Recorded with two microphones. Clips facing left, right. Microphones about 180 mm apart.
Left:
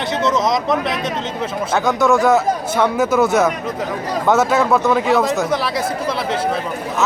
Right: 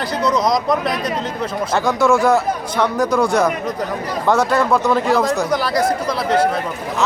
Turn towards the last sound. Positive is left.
turn(degrees=0)  # may be behind; listen again after turning